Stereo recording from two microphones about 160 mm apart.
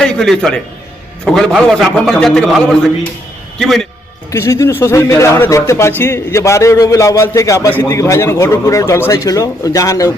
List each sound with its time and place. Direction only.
0.0 s a man's voice: 5° left (ahead or behind)
4.3 s speech: 20° left (ahead or behind)